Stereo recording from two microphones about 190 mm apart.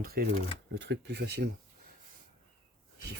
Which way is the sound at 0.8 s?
65° right (ahead or behind).